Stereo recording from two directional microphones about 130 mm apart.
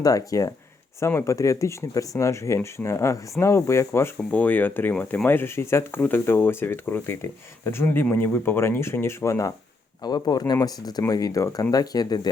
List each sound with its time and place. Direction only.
0.0 s speech: 30° left (ahead or behind)